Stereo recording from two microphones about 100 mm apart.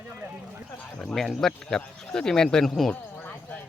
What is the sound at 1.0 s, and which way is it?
Speech, 5° left (ahead or behind).